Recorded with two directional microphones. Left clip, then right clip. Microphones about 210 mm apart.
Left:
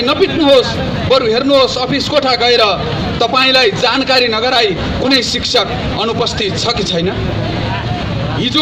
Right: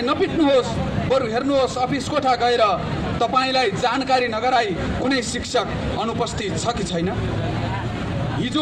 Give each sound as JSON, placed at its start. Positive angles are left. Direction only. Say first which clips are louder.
{"t": 0.0, "sound": "a man's voice", "louder": "left 8 dB", "side_deg": 20}